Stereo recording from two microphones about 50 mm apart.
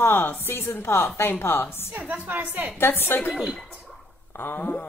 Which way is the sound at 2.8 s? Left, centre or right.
Left.